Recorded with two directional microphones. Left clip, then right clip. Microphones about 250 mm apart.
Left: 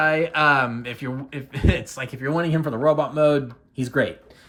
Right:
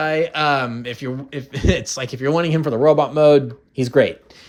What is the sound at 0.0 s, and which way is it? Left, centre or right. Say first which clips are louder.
Speech: even; centre.